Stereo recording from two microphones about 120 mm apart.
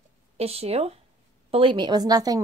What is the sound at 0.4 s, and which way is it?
Speech, 60° right (ahead or behind).